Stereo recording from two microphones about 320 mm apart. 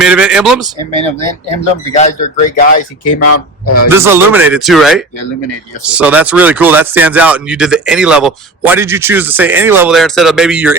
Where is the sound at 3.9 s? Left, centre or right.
Centre.